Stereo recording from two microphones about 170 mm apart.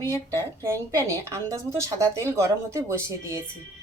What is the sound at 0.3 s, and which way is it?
Speech, 20° right (ahead or behind).